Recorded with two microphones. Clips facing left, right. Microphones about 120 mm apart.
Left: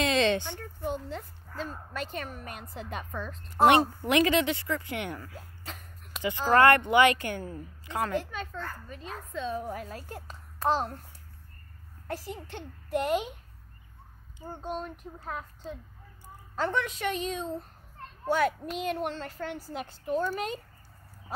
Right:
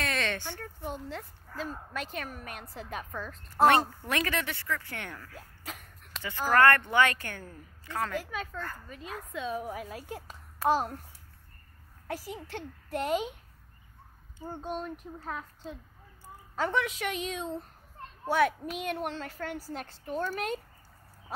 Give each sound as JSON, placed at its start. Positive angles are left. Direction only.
{"t": 0.0, "sound": "a sound", "side_deg": 20}
{"t": 0.6, "sound": "speech", "side_deg": 0}
{"t": 4.0, "sound": "a woman's voice", "side_deg": 15}
{"t": 5.6, "sound": "hiccup", "side_deg": -5}
{"t": 6.1, "sound": "a woman's voice", "side_deg": 15}
{"t": 8.1, "sound": "speech", "side_deg": -5}
{"t": 12.1, "sound": "speech", "side_deg": -5}
{"t": 14.5, "sound": "speech", "side_deg": 0}
{"t": 16.5, "sound": "speech", "side_deg": -5}